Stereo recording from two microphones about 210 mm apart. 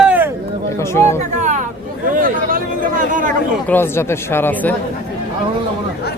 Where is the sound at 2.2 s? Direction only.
40° right (ahead or behind).